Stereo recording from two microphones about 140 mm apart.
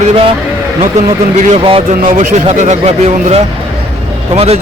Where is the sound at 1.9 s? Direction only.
70° right (ahead or behind).